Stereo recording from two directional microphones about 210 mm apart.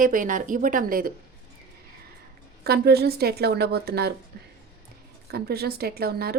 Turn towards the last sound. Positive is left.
turn(degrees=-50)  # may be behind; listen again after turning